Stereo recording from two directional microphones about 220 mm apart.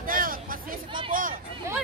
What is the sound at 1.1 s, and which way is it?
Hubbub, 40° right (ahead or behind).